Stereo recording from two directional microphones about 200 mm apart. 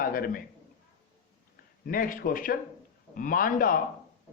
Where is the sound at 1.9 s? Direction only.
45° left (ahead or behind).